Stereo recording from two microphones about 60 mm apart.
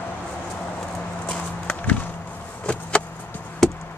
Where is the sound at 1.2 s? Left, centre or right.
Centre.